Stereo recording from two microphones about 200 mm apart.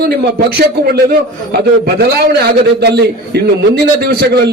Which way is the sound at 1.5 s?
55° right (ahead or behind).